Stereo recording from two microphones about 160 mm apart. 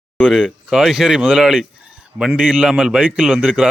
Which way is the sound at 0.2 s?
5° right (ahead or behind).